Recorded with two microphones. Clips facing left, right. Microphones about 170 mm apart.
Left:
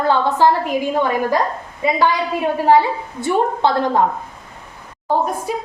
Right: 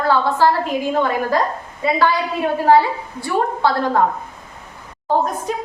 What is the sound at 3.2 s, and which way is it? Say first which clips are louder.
Speech: left 2 dB; 20° left (ahead or behind).